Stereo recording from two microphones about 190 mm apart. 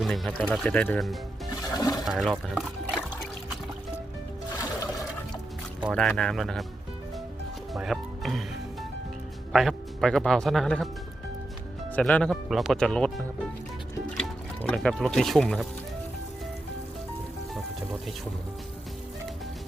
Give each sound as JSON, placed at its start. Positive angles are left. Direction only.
{"t": 0.0, "sound": "speech", "side_deg": 0}
{"t": 1.7, "sound": "speech", "side_deg": 20}
{"t": 2.0, "sound": "speech", "side_deg": 0}
{"t": 5.8, "sound": "speech", "side_deg": 0}
{"t": 7.7, "sound": "music", "side_deg": 0}
{"t": 9.5, "sound": "speech", "side_deg": 0}
{"t": 11.9, "sound": "speech", "side_deg": 5}